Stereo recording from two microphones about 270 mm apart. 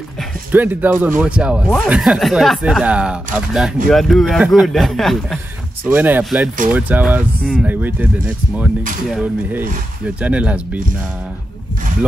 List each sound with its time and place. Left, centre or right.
0.5 s speech: centre